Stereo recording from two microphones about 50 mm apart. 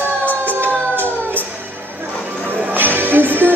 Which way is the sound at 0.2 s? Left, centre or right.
Left.